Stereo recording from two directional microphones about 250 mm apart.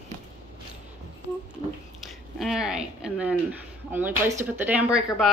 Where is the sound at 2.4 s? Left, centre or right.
Centre.